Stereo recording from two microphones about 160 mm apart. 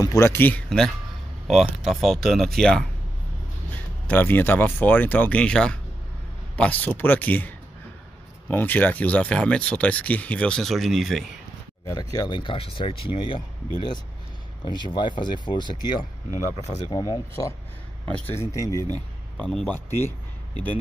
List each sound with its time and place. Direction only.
0.0 s speech: 20° left (ahead or behind)
4.1 s speech: 10° left (ahead or behind)
11.8 s speech: 20° left (ahead or behind)
14.6 s speech: 30° left (ahead or behind)
16.6 s speech: 45° left (ahead or behind)
16.9 s speech: 25° left (ahead or behind)
19.3 s speech: 5° left (ahead or behind)